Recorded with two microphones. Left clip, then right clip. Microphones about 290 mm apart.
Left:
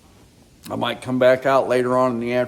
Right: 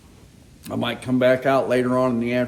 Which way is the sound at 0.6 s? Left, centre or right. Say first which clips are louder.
Left 2 dB; centre.